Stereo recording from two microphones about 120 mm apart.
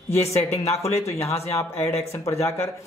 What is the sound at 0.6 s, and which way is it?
Speech, 60° left (ahead or behind).